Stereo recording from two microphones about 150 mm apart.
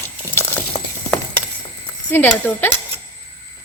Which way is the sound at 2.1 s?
10° left (ahead or behind).